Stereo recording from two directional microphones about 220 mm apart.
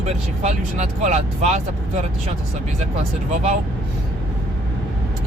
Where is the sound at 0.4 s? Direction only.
35° right (ahead or behind).